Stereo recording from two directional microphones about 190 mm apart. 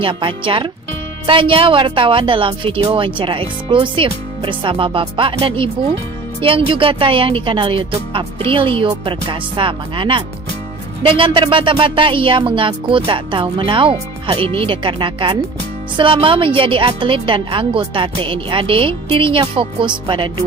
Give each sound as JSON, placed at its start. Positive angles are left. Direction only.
{"t": 0.0, "sound": "a woman's voice", "side_deg": -25}